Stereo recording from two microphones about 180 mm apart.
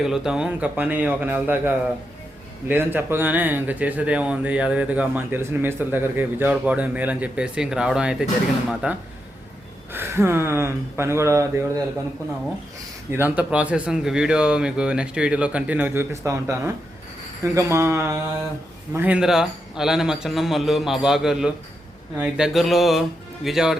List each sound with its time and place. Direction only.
0.0 s a man's voice: 5° right (ahead or behind)
13.1 s a man's voice: 10° right (ahead or behind)